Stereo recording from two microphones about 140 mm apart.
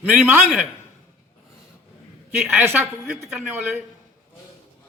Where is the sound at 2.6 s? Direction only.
15° right (ahead or behind).